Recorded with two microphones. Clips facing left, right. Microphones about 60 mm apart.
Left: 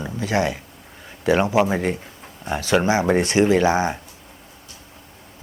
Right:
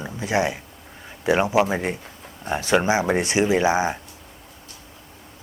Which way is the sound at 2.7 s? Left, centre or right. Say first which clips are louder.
Left 2 dB; centre.